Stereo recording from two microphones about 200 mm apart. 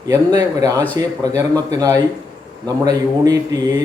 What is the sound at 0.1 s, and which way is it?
Speech, 20° right (ahead or behind).